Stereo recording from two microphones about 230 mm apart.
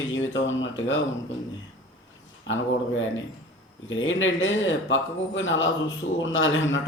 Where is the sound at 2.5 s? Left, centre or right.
Left.